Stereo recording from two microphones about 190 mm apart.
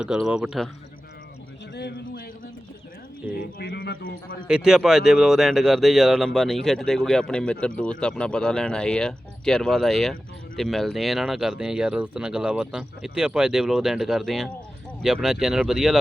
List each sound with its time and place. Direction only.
0.0 s speech: 5° right (ahead or behind)
1.7 s a sound: 60° left (ahead or behind)
3.6 s a man's voice: 60° left (ahead or behind)
4.4 s speech: 5° right (ahead or behind)